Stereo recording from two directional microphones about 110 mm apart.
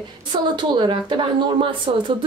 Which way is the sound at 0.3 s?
45° right (ahead or behind).